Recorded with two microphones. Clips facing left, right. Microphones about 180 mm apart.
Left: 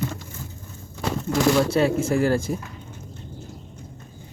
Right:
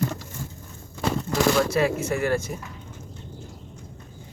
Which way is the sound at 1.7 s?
30° left (ahead or behind).